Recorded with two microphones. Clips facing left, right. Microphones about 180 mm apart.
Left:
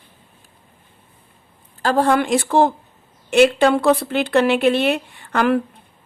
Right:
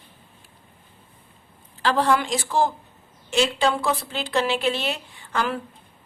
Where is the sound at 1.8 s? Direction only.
45° left (ahead or behind).